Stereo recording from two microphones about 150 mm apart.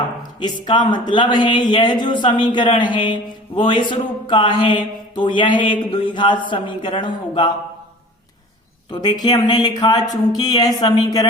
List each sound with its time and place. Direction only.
0.2 s speech: 30° left (ahead or behind)
8.9 s speech: 30° left (ahead or behind)